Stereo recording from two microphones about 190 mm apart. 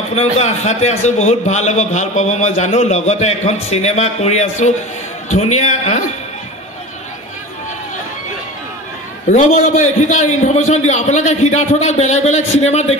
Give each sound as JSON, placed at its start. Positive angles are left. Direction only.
{"t": 0.1, "sound": "a man's voice", "side_deg": 35}
{"t": 9.3, "sound": "a man's voice", "side_deg": 40}